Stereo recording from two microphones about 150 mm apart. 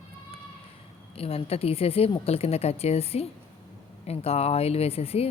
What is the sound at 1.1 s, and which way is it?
Speech, 40° left (ahead or behind).